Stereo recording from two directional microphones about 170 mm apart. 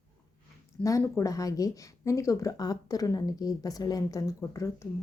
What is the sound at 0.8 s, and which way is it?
Speech, 20° left (ahead or behind).